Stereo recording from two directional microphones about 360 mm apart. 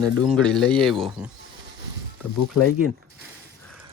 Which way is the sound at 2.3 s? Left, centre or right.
Left.